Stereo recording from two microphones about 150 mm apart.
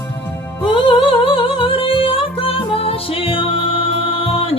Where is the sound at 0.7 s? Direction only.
35° left (ahead or behind).